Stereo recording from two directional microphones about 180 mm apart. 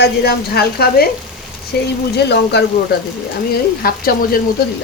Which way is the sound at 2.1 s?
65° left (ahead or behind).